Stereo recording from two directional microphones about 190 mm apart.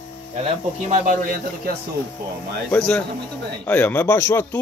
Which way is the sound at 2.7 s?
5° left (ahead or behind).